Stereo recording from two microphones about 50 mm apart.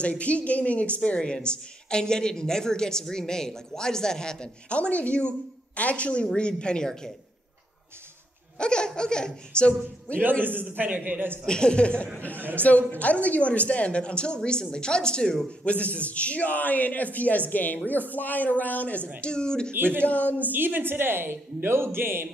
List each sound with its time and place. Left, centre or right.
0.0 s a woman's voice: left
8.5 s speech: centre
10.4 s a man's voice: right
11.4 s a woman's voice: centre
12.4 s speech: right
12.6 s a woman's voice: left
19.2 s speech: centre
19.7 s speech: right
20.1 s a man's voice: left
20.5 s speech: right